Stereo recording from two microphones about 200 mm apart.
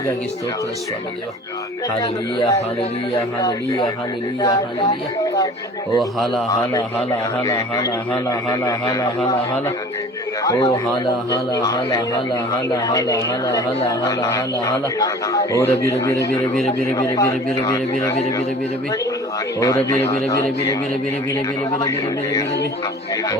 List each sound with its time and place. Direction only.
2.0 s a man's voice: 20° left (ahead or behind)
6.0 s a man's voice: centre (ahead or behind)
6.5 s a man's voice: 20° left (ahead or behind)
19.5 s a man's voice: 15° left (ahead or behind)
21.8 s a man's voice: 15° left (ahead or behind)